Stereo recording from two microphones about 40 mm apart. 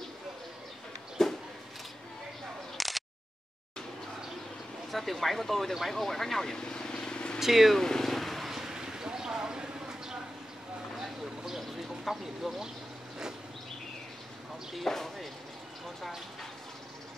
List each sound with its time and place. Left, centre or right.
1.2 s a sound: centre
2.8 s a sound: centre
4.9 s speech: centre
5.9 s vehicle: centre; by 7.3 s left
7.3 s speech: centre
7.7 s vehicle: centre
8.5 s a sound: centre
11.0 s vehicle: centre
12.1 s speech: centre
14.9 s speech: centre